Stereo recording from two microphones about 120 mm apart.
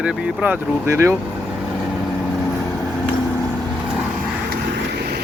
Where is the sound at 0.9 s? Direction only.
25° right (ahead or behind).